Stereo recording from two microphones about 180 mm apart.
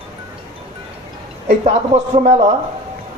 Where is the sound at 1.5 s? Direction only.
35° right (ahead or behind).